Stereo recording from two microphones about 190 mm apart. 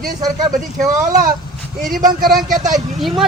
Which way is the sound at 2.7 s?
Centre (ahead or behind).